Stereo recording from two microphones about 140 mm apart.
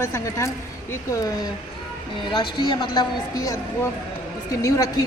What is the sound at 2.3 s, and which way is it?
A woman's voice, 35° left (ahead or behind).